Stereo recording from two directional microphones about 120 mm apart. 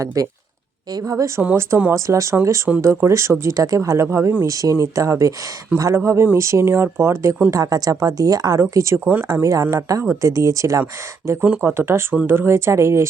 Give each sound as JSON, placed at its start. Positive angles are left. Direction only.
{"t": 0.0, "sound": "a woman's voice", "side_deg": -30}
{"t": 1.4, "sound": "speech", "side_deg": -15}
{"t": 11.4, "sound": "speech", "side_deg": -10}
{"t": 11.7, "sound": "speech", "side_deg": -20}